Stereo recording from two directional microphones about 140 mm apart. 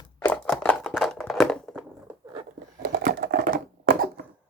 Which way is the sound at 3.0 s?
90° right.